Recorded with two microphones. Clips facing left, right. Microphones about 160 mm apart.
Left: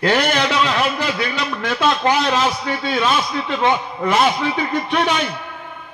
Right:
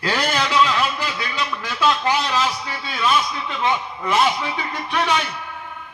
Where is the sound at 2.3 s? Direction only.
25° left (ahead or behind).